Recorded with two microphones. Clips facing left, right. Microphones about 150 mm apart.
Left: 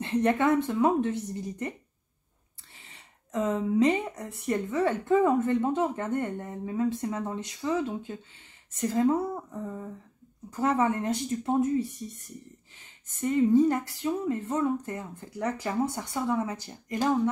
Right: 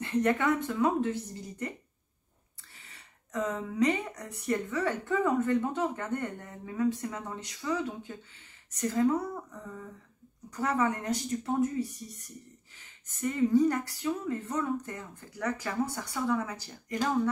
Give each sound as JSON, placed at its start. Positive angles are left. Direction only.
{"t": 0.0, "sound": "speech", "side_deg": 25}
{"t": 2.8, "sound": "speech", "side_deg": 25}